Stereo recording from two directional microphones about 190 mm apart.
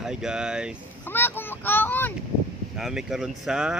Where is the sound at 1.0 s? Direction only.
10° left (ahead or behind).